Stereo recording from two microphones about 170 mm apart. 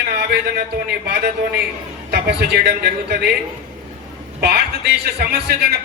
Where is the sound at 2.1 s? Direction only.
75° right (ahead or behind).